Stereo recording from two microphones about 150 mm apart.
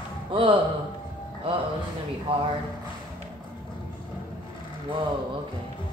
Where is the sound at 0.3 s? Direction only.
35° right (ahead or behind).